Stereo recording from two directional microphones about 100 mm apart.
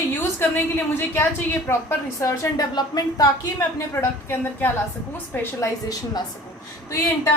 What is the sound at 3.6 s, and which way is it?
A woman's voice, 25° left (ahead or behind).